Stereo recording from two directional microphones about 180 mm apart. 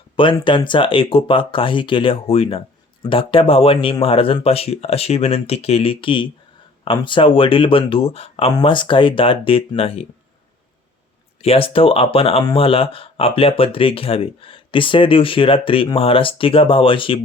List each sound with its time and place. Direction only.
0.2 s speech: 30° left (ahead or behind)
11.4 s speech: 30° left (ahead or behind)